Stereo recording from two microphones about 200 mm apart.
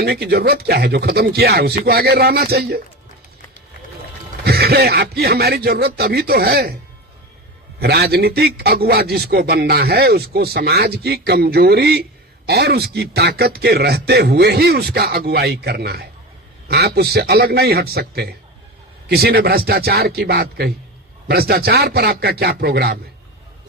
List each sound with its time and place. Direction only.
0.0 s a man's voice: 55° right (ahead or behind)
4.4 s a man's voice: 50° right (ahead or behind)
7.8 s a man's voice: 50° right (ahead or behind)